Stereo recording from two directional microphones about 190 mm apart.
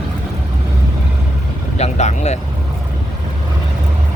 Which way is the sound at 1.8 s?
35° left (ahead or behind).